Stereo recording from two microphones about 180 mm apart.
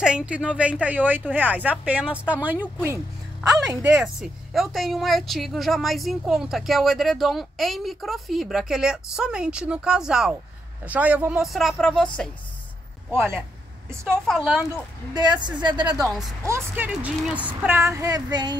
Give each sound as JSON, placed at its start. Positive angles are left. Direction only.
{"t": 0.0, "sound": "speech", "side_deg": -5}
{"t": 13.1, "sound": "speech", "side_deg": -10}
{"t": 14.2, "sound": "speech", "side_deg": 0}
{"t": 15.4, "sound": "speech", "side_deg": -25}
{"t": 16.1, "sound": "speech", "side_deg": 0}
{"t": 16.4, "sound": "speech", "side_deg": -15}